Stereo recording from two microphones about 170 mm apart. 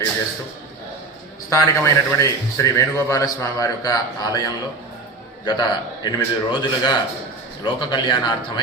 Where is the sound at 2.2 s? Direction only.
20° left (ahead or behind).